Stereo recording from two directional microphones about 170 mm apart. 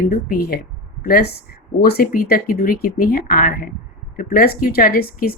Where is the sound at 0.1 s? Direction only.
60° left (ahead or behind).